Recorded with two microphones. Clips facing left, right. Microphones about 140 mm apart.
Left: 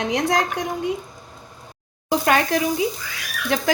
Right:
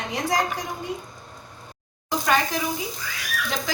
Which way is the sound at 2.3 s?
70° left (ahead or behind).